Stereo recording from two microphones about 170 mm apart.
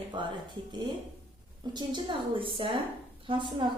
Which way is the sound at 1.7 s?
30° right (ahead or behind).